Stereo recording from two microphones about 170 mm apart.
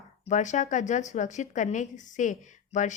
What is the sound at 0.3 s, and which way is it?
A woman's voice, 45° left (ahead or behind).